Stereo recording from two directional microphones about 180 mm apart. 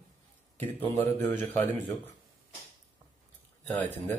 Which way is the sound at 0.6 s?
10° left (ahead or behind).